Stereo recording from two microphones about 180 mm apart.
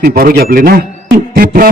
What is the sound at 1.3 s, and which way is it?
Beatboxing, 55° right (ahead or behind).